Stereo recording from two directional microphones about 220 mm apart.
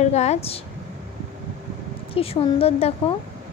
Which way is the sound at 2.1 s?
25° left (ahead or behind).